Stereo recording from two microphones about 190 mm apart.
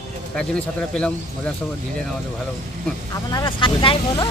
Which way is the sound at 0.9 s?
5° left (ahead or behind).